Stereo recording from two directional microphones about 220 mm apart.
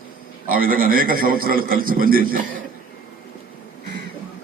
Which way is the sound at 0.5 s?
40° right (ahead or behind).